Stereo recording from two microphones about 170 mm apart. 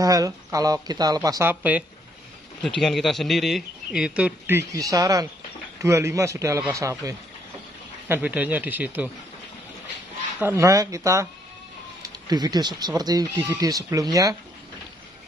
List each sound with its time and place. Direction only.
0.0 s speech: 20° right (ahead or behind)
2.8 s a man's voice: centre (ahead or behind)
10.4 s a man's voice: 15° right (ahead or behind)